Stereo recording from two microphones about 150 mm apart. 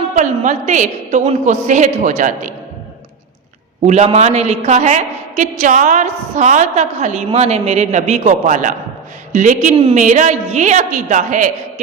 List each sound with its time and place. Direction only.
0.1 s a woman's voice: 55° right (ahead or behind)
3.8 s a woman's voice: 45° right (ahead or behind)